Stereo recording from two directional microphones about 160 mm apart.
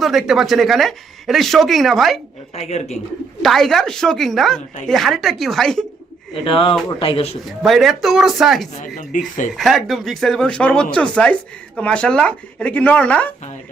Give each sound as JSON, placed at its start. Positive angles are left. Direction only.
{"t": 0.0, "sound": "speech", "side_deg": 0}
{"t": 2.6, "sound": "speech", "side_deg": 45}
{"t": 3.4, "sound": "speech", "side_deg": 0}
{"t": 6.4, "sound": "speech", "side_deg": 35}
{"t": 7.4, "sound": "speech", "side_deg": 0}
{"t": 9.0, "sound": "speech", "side_deg": 55}
{"t": 9.6, "sound": "speech", "side_deg": 0}